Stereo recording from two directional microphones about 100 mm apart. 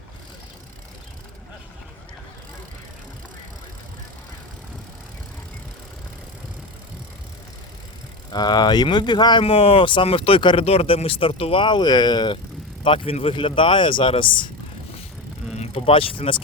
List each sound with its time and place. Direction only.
8.3 s speech: 45° left (ahead or behind)
9.4 s speech: 70° left (ahead or behind)
10.7 s speech: 75° left (ahead or behind)
11.6 s speech: 50° left (ahead or behind)
12.8 s speech: 65° left (ahead or behind)
15.5 s speech: 85° left; by 16.4 s 60° left (ahead or behind)